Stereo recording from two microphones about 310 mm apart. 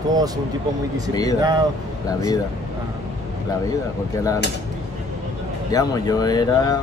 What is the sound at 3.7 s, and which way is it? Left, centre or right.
Speech, centre.